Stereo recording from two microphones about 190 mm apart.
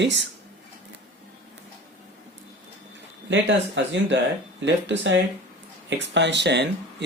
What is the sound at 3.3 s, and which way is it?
Speech, 70° right (ahead or behind).